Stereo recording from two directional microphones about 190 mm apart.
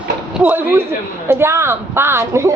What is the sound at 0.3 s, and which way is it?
A woman's voice, 10° right (ahead or behind).